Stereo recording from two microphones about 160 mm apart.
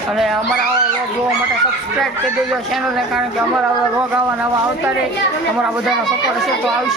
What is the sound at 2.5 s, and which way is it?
A man's voice, centre (ahead or behind).